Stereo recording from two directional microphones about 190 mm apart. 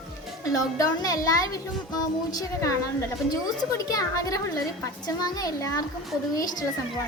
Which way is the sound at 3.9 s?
20° left (ahead or behind).